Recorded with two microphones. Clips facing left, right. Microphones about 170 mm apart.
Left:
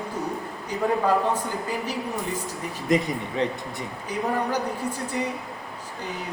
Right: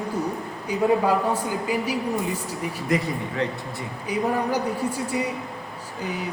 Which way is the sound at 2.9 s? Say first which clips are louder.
Left 2 dB; 20° left (ahead or behind).